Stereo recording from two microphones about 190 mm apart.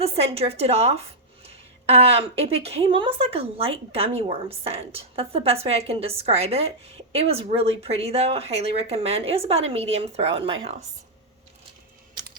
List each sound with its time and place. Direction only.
0.0 s a woman's voice: 30° right (ahead or behind)